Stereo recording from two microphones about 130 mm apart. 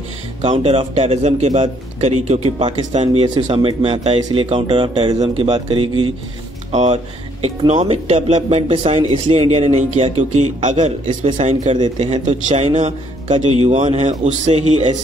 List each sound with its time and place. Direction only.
0.4 s a man's voice: 45° right (ahead or behind)
3.3 s a man's voice: 40° right (ahead or behind)
6.7 s a man's voice: 60° right (ahead or behind)